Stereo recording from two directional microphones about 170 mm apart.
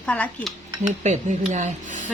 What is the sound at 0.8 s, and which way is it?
Dishes, 45° right (ahead or behind).